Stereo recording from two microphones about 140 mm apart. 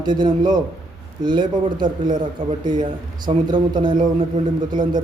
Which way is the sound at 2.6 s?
70° right (ahead or behind).